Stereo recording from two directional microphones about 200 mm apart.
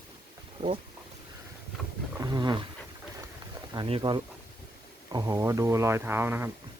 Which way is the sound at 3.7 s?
25° right (ahead or behind).